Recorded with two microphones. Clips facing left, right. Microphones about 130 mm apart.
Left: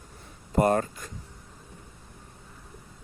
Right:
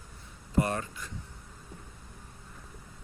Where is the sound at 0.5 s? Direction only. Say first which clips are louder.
Left 6 dB; 45° left (ahead or behind).